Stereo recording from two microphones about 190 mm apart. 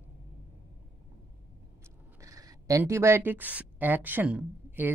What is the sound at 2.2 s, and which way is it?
Speech, 15° right (ahead or behind).